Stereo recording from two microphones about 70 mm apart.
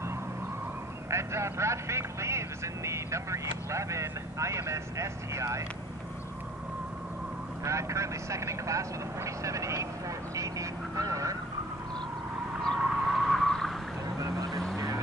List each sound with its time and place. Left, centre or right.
1.1 s speech: right
7.6 s speech: right
10.3 s quack: right
12.6 s vehicle: centre
14.5 s goose: centre